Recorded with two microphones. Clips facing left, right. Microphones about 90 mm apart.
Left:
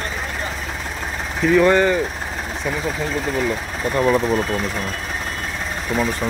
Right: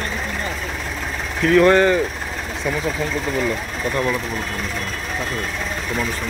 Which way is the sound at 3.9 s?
25° left (ahead or behind).